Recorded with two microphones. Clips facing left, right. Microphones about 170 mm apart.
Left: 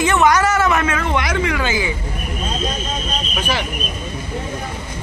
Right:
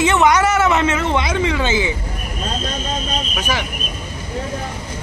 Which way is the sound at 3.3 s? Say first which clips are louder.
Left 2 dB; 10° right (ahead or behind).